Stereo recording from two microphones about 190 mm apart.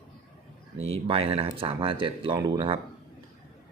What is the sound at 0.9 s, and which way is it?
Speech, 30° right (ahead or behind).